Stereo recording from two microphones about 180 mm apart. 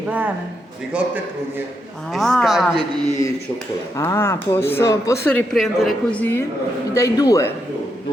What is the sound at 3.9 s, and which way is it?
Speech, 15° left (ahead or behind).